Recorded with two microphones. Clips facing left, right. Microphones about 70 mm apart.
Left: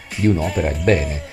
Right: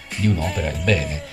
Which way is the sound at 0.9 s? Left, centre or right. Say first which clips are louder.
Left 4 dB; left.